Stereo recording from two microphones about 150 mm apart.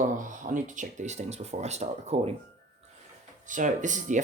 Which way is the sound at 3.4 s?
60° right (ahead or behind).